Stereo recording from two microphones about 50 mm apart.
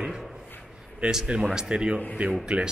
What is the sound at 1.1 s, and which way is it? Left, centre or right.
Speech, centre.